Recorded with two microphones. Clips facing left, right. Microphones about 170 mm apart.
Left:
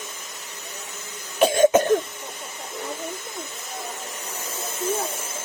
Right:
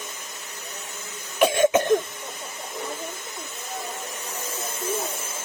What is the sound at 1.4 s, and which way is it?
Cough, 35° left (ahead or behind).